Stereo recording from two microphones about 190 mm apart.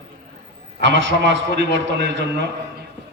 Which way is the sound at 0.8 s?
75° right (ahead or behind).